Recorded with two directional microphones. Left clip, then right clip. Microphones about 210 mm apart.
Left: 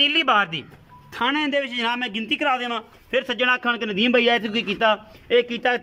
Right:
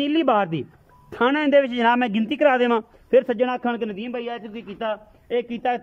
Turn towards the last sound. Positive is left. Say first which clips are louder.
# left 4 dB
turn(degrees=-10)  # may be behind; listen again after turning